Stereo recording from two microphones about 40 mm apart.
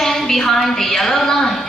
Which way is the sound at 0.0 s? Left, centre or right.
Centre.